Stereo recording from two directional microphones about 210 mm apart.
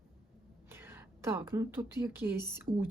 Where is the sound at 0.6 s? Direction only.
10° right (ahead or behind).